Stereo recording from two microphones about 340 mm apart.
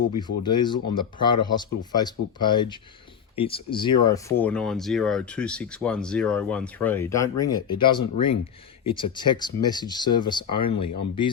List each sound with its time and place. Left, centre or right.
0.2 s speech: centre